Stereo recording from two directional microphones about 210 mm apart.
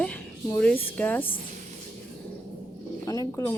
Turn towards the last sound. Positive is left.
turn(degrees=15)  # may be behind; listen again after turning